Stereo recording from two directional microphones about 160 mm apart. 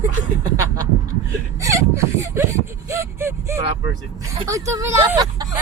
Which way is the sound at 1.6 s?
20° right (ahead or behind).